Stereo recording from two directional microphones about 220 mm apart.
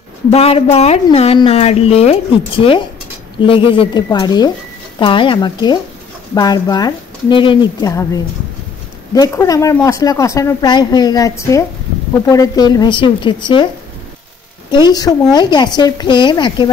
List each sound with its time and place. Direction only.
0.3 s a woman's voice: 25° left (ahead or behind)
14.7 s a woman's voice: 20° left (ahead or behind)